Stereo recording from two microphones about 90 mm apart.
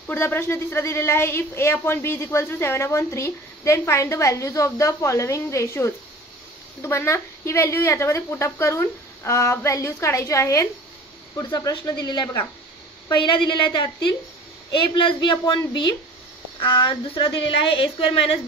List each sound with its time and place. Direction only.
0.0 s a woman's voice: 25° left (ahead or behind)
11.9 s a woman's voice: 55° left (ahead or behind)
13.1 s a woman's voice: 65° left (ahead or behind); by 18.4 s 90° left